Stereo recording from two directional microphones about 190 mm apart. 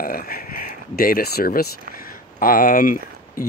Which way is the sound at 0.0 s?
50° left (ahead or behind).